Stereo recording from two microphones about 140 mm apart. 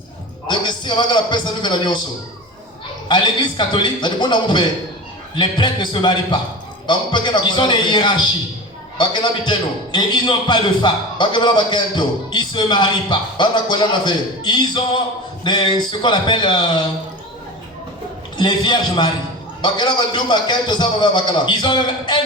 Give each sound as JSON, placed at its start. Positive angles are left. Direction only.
{"t": 0.4, "sound": "a man's voice", "side_deg": 35}
{"t": 3.1, "sound": "a man's voice", "side_deg": 35}
{"t": 18.3, "sound": "a man's voice", "side_deg": 30}